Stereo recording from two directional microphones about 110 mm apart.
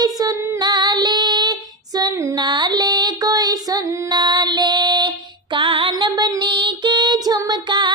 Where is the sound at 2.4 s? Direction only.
40° right (ahead or behind).